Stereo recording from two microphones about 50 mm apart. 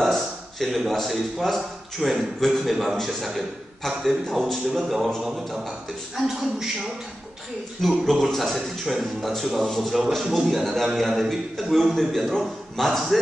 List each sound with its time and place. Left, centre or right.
0.0 s a man's voice: centre
7.8 s a man's voice: centre